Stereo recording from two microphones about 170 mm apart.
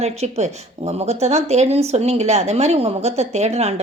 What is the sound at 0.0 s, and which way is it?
Speech, 40° right (ahead or behind).